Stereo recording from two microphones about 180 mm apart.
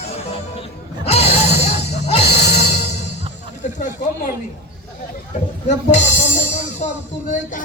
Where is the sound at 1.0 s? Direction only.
35° left (ahead or behind).